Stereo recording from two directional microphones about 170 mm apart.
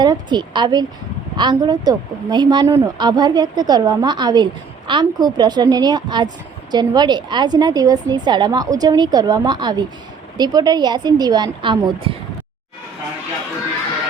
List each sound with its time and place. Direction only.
0.0 s a woman's voice: 25° right (ahead or behind)